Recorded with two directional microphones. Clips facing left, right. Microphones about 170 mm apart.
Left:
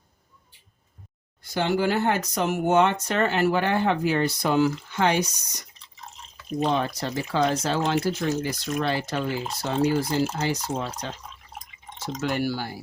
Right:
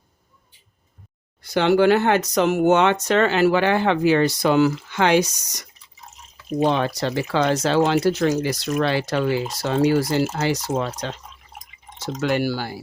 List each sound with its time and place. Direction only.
1.4 s speech: 75° right (ahead or behind); by 5.6 s 90° right
6.7 s speech: 85° right
10.3 s speech: 90° right
12.2 s speech: 90° right